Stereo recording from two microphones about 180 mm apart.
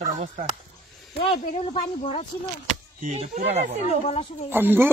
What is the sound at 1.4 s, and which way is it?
Speech, 50° left (ahead or behind).